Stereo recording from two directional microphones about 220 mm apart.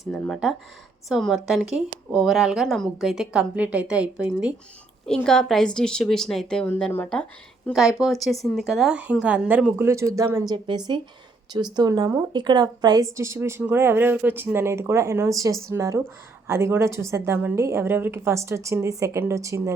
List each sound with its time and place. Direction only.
0.1 s a woman's voice: centre (ahead or behind)